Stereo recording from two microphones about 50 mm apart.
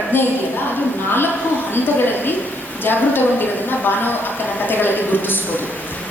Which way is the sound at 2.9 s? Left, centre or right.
Left.